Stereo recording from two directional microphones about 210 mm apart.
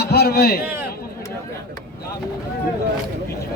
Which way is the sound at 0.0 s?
50° left (ahead or behind).